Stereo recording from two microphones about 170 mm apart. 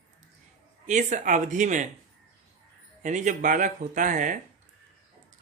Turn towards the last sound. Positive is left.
turn(degrees=-50)  # may be behind; listen again after turning